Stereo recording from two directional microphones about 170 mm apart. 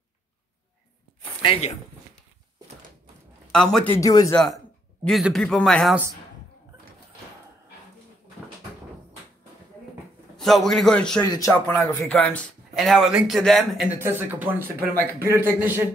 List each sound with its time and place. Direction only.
1.4 s speech: 35° left (ahead or behind)
3.5 s speech: 5° left (ahead or behind)
4.0 s speech: 20° left (ahead or behind)
5.0 s speech: centre (ahead or behind)
10.3 s speech: centre (ahead or behind)
11.1 s speech: 25° left (ahead or behind)
11.5 s speech: 10° left (ahead or behind)
13.9 s speech: 15° right (ahead or behind)